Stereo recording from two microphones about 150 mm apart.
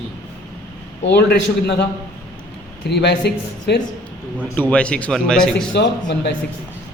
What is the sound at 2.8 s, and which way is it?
Speech, 90° left.